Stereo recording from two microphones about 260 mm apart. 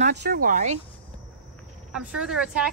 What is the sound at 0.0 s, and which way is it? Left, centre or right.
Speech, right.